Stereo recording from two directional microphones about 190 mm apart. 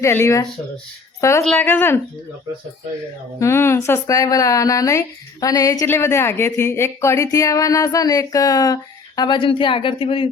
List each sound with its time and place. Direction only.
0.0 s speech: 15° left (ahead or behind)
3.4 s speech: 15° left (ahead or behind)